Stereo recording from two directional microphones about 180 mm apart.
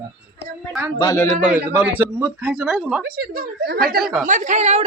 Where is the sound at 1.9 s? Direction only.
10° right (ahead or behind).